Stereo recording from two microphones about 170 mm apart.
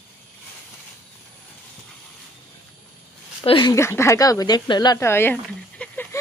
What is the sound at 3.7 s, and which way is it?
Speech, 15° left (ahead or behind).